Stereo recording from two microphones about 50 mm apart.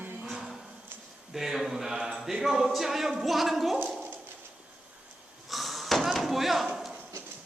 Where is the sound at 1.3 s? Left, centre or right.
Centre.